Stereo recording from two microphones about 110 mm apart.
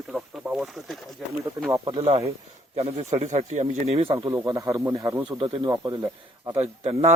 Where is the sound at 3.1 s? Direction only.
90° right; by 4.2 s 60° right (ahead or behind).